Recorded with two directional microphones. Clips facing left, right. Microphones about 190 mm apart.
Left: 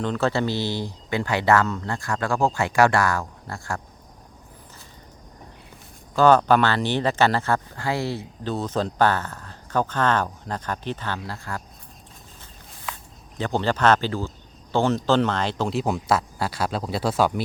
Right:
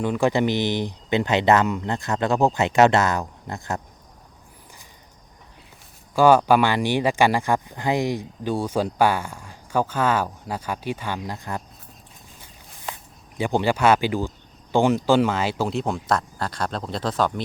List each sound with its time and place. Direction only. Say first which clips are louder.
0.0 s speech: right 3 dB; 10° right (ahead or behind)
6.1 s speech: right 1 dB; 10° right (ahead or behind)
13.4 s speech: right 2 dB; 10° right (ahead or behind)
15.8 s speech: left 1 dB; 5° left (ahead or behind)